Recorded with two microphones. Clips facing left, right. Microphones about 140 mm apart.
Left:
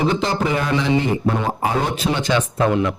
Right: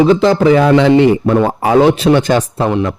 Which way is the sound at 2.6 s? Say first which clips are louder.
Right 3 dB; 25° right (ahead or behind).